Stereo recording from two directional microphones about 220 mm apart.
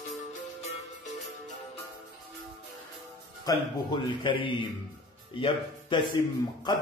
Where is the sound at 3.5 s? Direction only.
15° left (ahead or behind).